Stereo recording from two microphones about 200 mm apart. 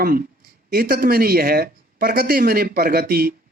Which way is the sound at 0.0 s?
45° right (ahead or behind).